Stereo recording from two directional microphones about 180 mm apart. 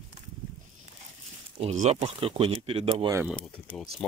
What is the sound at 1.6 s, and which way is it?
Speech, 40° right (ahead or behind).